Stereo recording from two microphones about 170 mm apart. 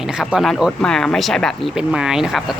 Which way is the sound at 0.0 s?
5° right (ahead or behind).